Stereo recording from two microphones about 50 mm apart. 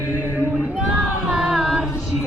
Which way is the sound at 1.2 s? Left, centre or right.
Centre.